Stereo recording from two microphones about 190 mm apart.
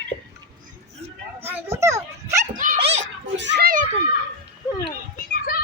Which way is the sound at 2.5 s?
45° right (ahead or behind).